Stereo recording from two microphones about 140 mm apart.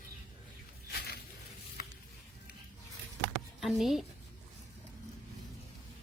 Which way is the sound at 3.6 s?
Centre (ahead or behind).